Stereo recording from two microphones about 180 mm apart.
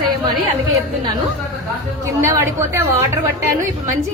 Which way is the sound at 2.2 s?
15° right (ahead or behind).